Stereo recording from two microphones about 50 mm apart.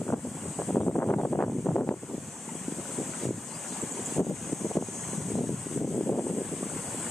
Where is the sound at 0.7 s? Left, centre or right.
Left.